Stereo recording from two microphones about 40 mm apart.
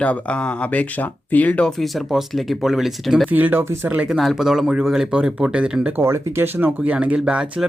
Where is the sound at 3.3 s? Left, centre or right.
Right.